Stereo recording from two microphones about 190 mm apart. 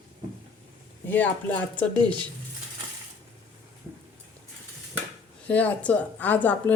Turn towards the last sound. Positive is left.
turn(degrees=10)  # may be behind; listen again after turning